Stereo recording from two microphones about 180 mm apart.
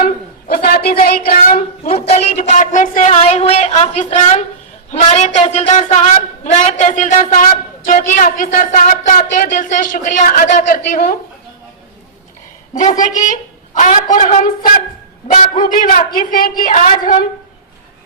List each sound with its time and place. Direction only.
0.0 s a sound: 60° left (ahead or behind)
1.9 s a woman's voice: 35° left (ahead or behind)
12.7 s a woman's voice: 45° left (ahead or behind)